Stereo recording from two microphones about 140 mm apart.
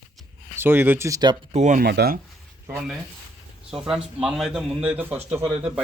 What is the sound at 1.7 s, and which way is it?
Speech, 90° right.